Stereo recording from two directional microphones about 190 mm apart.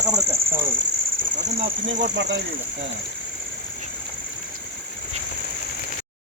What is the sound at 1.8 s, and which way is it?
Speech, 65° right (ahead or behind).